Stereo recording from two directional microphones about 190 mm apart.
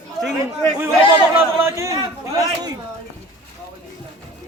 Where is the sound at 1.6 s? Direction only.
15° right (ahead or behind).